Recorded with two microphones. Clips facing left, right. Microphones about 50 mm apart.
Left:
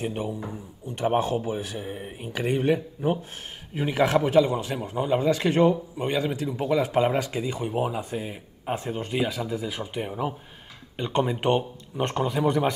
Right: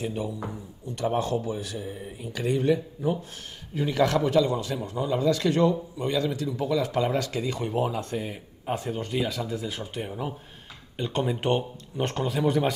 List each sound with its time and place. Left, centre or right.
0.0 s speech: left
3.7 s a man's voice: left
4.9 s a man's voice: left; by 12.7 s centre